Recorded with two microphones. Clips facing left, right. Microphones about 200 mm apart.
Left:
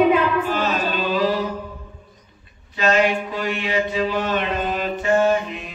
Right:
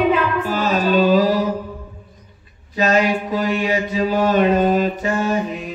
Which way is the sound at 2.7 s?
40° right (ahead or behind).